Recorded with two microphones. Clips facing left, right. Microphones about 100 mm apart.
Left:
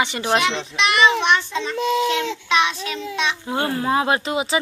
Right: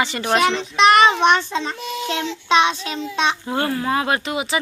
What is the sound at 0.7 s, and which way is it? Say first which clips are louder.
A child's voice: right 4 dB; 45° right (ahead or behind).